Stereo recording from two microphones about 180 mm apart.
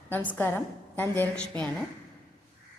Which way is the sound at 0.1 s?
10° left (ahead or behind).